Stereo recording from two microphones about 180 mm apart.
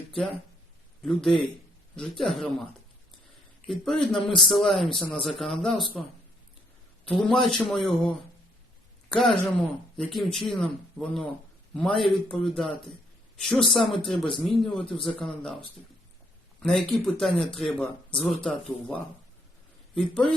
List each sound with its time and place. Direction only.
1.0 s speech: centre (ahead or behind)
3.7 s speech: centre (ahead or behind)
7.1 s speech: centre (ahead or behind)
16.6 s speech: centre (ahead or behind)